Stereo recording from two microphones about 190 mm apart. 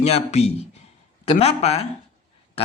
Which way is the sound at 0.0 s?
35° left (ahead or behind).